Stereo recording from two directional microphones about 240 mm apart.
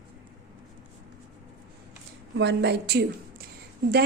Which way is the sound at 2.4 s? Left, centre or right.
Right.